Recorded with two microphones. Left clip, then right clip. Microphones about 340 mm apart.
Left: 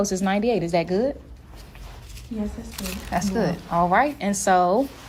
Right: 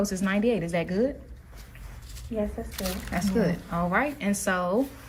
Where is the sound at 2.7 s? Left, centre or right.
Centre.